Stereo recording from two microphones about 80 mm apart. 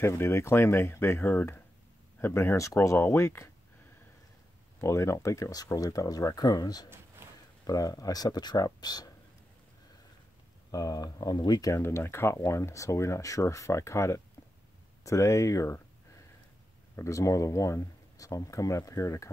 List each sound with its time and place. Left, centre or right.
0.0 s speech: left
4.8 s speech: left
10.7 s speech: left
11.7 s speech: left
16.9 s speech: left